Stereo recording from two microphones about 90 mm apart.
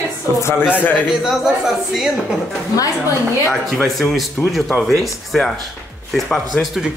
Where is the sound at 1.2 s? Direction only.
5° right (ahead or behind).